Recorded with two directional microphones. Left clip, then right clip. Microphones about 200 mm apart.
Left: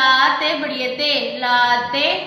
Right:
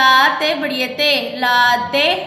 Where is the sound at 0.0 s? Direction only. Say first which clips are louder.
Right 2 dB; 50° right (ahead or behind).